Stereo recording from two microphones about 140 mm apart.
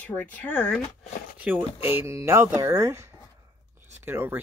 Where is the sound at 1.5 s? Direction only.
10° right (ahead or behind).